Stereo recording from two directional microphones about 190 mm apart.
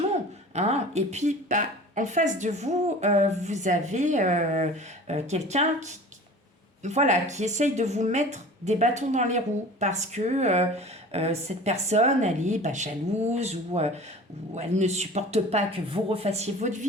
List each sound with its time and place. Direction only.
0.5 s a woman's voice: 35° right (ahead or behind)